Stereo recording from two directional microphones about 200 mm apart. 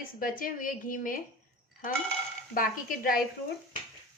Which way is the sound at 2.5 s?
45° left (ahead or behind).